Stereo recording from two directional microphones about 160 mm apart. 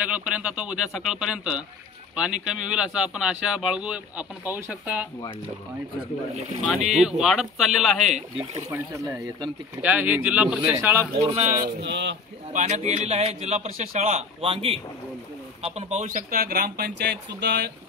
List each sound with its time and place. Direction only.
0.0 s speech: 10° right (ahead or behind)
6.9 s speech: 5° right (ahead or behind)
8.6 s speech: 20° right (ahead or behind)
11.2 s speech: 40° right (ahead or behind)
11.5 s speech: 80° right
12.5 s a man's voice: 45° right (ahead or behind); by 17.6 s 90° right